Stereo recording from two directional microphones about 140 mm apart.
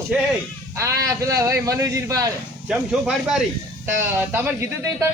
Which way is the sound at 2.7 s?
5° right (ahead or behind).